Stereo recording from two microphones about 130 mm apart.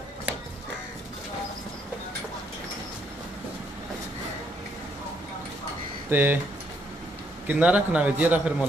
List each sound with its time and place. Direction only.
6.0 s speech: 15° right (ahead or behind)
7.4 s a man's voice: 10° right (ahead or behind)